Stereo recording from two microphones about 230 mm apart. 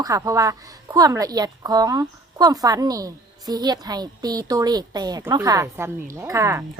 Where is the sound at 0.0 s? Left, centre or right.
Centre.